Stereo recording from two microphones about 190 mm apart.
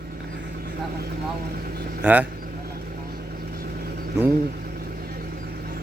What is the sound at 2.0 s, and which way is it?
Speech, 10° right (ahead or behind).